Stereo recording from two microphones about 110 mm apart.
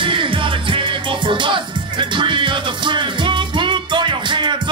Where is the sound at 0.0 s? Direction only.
50° right (ahead or behind).